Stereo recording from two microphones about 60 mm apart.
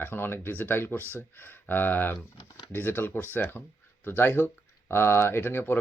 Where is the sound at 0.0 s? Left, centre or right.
Left.